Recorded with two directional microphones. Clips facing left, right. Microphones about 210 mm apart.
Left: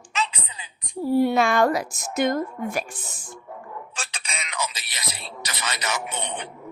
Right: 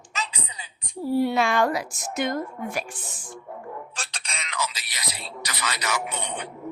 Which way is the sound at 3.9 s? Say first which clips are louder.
Left 2 dB; 5° left (ahead or behind).